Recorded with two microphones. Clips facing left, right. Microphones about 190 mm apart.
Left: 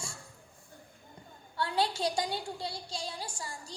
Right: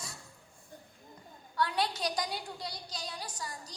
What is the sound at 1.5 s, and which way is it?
A woman's voice, 30° left (ahead or behind).